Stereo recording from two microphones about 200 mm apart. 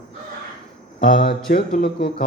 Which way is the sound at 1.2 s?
50° left (ahead or behind).